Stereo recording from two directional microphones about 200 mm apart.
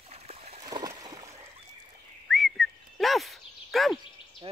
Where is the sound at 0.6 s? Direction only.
20° right (ahead or behind).